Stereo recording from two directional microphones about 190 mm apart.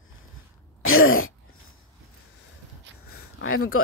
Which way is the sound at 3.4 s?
90° left.